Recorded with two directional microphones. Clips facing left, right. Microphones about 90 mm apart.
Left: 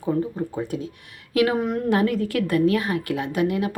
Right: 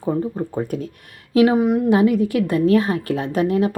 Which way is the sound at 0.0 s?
40° right (ahead or behind).